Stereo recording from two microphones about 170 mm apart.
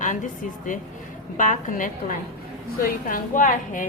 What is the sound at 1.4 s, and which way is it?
A woman's voice, 50° left (ahead or behind).